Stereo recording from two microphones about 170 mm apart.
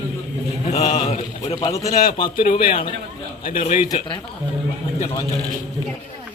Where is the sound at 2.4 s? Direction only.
55° left (ahead or behind).